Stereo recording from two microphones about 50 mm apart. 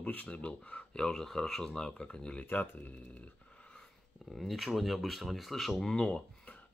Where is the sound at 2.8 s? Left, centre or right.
Left.